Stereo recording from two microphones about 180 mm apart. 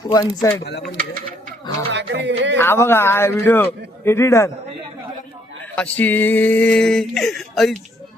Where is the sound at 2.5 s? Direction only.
15° left (ahead or behind).